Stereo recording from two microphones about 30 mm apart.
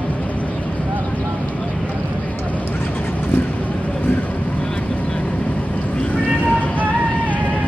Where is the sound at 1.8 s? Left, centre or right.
Left.